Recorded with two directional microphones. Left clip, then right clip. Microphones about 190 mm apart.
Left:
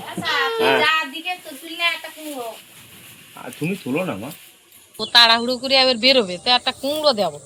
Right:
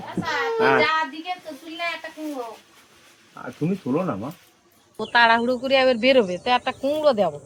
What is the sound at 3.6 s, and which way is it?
Speech, 5° right (ahead or behind).